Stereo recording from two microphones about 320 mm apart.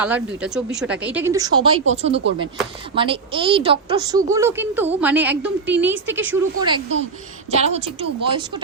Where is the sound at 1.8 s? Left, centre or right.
Centre.